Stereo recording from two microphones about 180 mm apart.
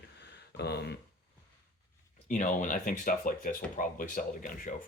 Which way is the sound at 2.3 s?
45° left (ahead or behind).